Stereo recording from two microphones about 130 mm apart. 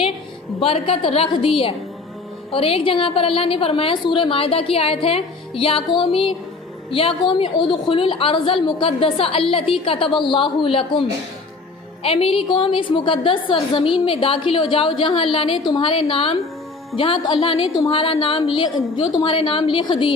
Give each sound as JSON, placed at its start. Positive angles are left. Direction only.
{"t": 0.6, "sound": "a woman's voice", "side_deg": 45}
{"t": 2.5, "sound": "a woman's voice", "side_deg": 45}
{"t": 12.0, "sound": "a woman's voice", "side_deg": 45}